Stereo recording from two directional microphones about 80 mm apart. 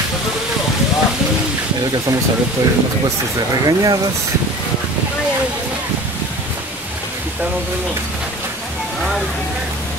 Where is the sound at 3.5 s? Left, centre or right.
Right.